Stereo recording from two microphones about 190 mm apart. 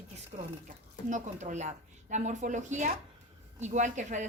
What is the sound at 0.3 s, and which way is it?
A woman's voice, 45° right (ahead or behind).